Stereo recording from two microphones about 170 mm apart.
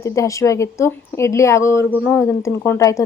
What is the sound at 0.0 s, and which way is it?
A woman's voice, 20° left (ahead or behind).